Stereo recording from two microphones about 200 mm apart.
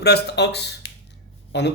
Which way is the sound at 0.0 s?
55° left (ahead or behind).